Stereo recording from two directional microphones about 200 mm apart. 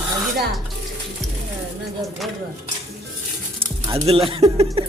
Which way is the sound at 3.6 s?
30° right (ahead or behind).